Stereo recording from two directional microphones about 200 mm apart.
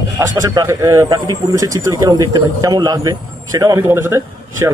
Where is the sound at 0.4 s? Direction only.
15° right (ahead or behind).